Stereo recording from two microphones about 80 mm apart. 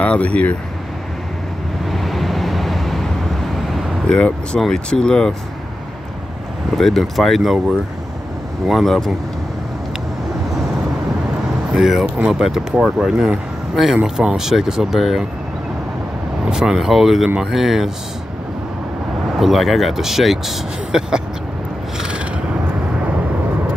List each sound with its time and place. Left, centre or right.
0.0 s speech: centre
1.9 s vehicle: centre
3.7 s speech: centre
6.7 s speech: centre
11.7 s speech: centre
16.4 s speech: centre
19.3 s speech: centre
21.9 s a sound: centre